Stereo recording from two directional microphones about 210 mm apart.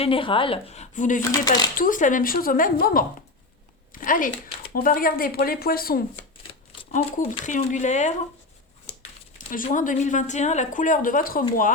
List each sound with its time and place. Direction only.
0.0 s a woman's voice: 25° left (ahead or behind)
1.3 s a woman's voice: 20° left (ahead or behind)
1.7 s a woman's voice: 40° left (ahead or behind)
6.5 s speech: 35° left (ahead or behind)
9.5 s speech: 40° left (ahead or behind)